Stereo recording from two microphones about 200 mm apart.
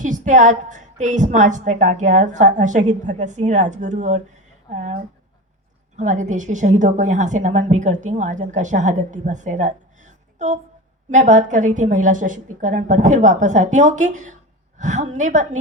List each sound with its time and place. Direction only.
0.0 s a woman's voice: 40° right (ahead or behind)
6.0 s a woman's voice: 40° right (ahead or behind)